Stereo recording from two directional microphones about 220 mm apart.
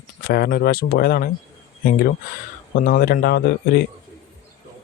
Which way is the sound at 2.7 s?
40° left (ahead or behind).